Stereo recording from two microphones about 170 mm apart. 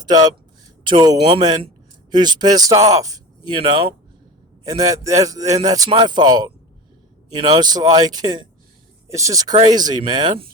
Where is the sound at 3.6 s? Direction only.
35° right (ahead or behind).